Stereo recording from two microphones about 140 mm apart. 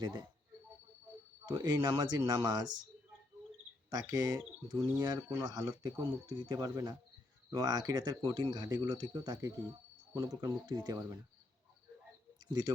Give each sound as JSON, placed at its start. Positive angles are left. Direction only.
{"t": 0.0, "sound": "speech", "side_deg": -25}
{"t": 1.5, "sound": "speech", "side_deg": -30}
{"t": 3.8, "sound": "speech", "side_deg": -25}